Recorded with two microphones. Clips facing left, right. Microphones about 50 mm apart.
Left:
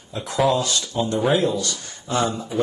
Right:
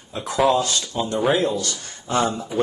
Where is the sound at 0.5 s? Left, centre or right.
Right.